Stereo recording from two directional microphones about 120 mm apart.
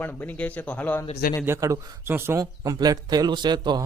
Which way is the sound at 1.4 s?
25° right (ahead or behind).